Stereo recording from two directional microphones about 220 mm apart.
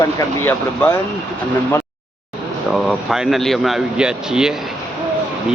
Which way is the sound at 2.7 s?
Centre (ahead or behind).